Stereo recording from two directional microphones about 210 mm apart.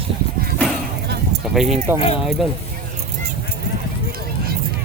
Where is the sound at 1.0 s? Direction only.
50° right (ahead or behind).